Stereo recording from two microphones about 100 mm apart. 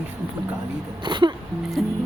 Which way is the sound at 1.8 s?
5° right (ahead or behind).